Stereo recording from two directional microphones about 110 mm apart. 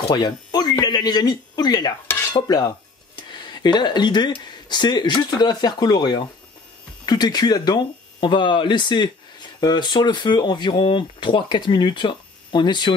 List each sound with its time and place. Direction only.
0.1 s speech: 40° left (ahead or behind)